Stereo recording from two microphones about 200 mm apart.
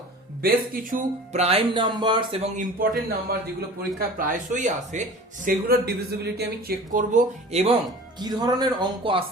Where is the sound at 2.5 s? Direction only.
40° right (ahead or behind).